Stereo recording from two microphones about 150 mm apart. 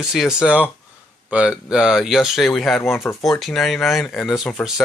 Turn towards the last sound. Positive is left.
turn(degrees=0)  # may be behind; listen again after turning